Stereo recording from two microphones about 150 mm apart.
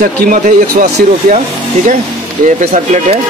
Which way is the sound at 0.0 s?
65° right (ahead or behind).